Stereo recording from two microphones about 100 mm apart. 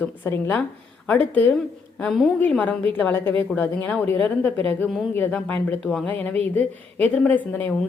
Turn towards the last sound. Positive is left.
turn(degrees=15)  # may be behind; listen again after turning